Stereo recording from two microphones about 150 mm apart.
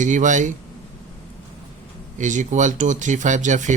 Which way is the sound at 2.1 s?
55° right (ahead or behind).